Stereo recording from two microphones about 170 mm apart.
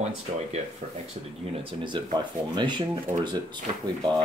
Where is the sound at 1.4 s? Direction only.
35° right (ahead or behind).